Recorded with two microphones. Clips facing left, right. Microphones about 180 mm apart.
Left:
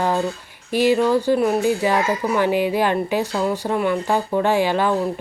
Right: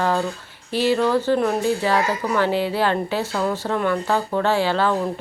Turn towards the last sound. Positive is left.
turn(degrees=15)  # may be behind; listen again after turning